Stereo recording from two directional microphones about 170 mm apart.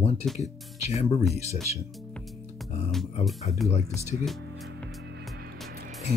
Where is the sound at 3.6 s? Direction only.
40° left (ahead or behind).